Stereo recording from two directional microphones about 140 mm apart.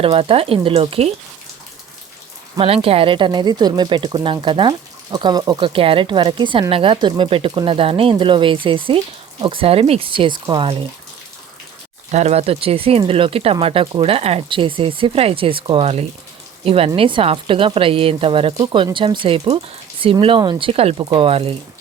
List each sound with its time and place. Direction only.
0.0 s speech: 40° right (ahead or behind)
2.6 s speech: 45° right (ahead or behind)
12.1 s speech: 50° right (ahead or behind)